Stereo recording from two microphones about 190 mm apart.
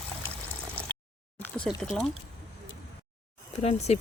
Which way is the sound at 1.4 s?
5° left (ahead or behind).